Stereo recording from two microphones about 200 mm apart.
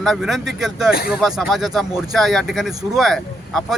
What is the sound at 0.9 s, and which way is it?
Speech, 50° left (ahead or behind).